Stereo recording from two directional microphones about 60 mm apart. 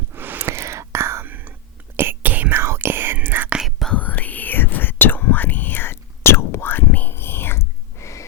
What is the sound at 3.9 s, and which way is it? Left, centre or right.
Whispering, left.